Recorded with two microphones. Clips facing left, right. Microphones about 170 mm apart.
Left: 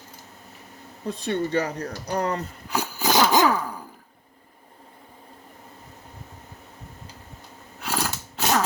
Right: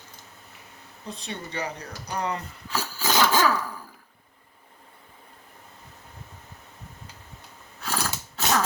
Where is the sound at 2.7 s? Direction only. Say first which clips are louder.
Left 4 dB; 20° left (ahead or behind).